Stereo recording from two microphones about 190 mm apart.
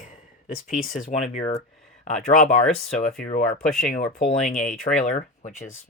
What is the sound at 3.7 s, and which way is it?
Speech, 45° left (ahead or behind).